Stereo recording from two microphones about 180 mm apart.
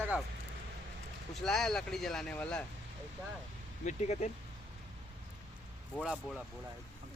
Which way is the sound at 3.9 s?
40° left (ahead or behind).